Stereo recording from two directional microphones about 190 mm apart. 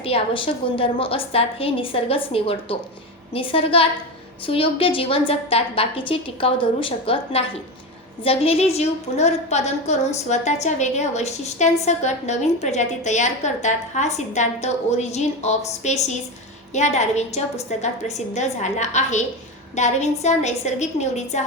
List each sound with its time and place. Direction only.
0.0 s a woman's voice: 30° left (ahead or behind)